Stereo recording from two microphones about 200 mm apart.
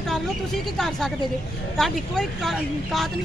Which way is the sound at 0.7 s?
Centre (ahead or behind).